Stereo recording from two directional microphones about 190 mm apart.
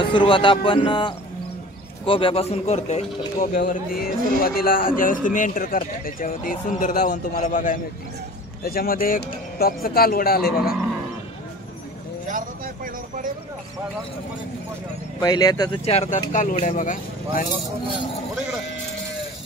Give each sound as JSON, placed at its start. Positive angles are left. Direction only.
{"t": 0.0, "sound": "speech", "side_deg": 25}
{"t": 3.5, "sound": "a man's voice", "side_deg": 50}
{"t": 12.3, "sound": "vehicle", "side_deg": -45}
{"t": 15.1, "sound": "a man's voice", "side_deg": 20}